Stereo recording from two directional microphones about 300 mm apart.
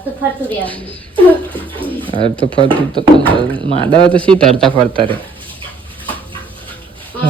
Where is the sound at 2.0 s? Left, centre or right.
Centre.